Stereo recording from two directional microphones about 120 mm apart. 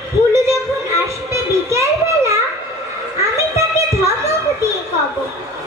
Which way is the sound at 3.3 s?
25° right (ahead or behind).